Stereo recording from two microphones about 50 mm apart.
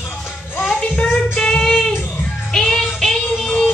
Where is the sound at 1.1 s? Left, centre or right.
Centre.